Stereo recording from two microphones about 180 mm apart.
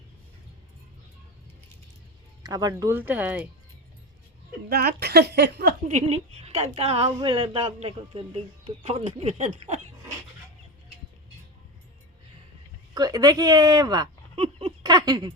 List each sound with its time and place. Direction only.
2.4 s speech: 20° right (ahead or behind)
4.7 s a woman's voice: 60° right (ahead or behind)
5.9 s a woman's voice: 40° right (ahead or behind)
12.9 s speech: 20° right (ahead or behind)